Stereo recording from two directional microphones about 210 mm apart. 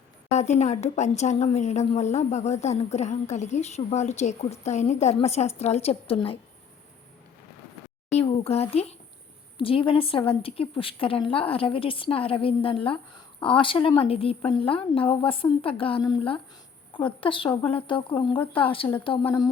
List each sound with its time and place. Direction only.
0.3 s speech: 35° left (ahead or behind)
8.1 s a sound: 30° left (ahead or behind)
8.7 s a woman's voice: 30° left (ahead or behind)